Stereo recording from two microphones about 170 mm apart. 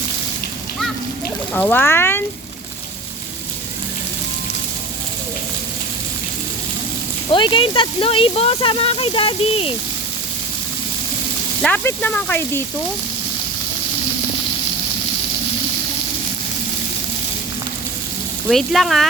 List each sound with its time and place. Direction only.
1.5 s speech: 10° left (ahead or behind)
7.3 s speech: 30° left (ahead or behind)
11.6 s speech: 10° left (ahead or behind)
18.4 s speech: centre (ahead or behind)